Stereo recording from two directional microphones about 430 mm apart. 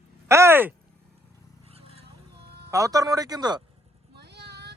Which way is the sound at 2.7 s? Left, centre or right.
Centre.